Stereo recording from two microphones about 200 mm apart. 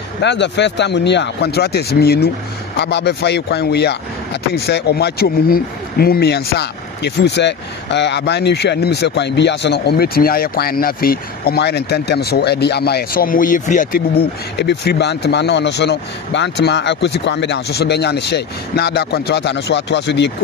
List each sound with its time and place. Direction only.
0.2 s speech: 60° left (ahead or behind)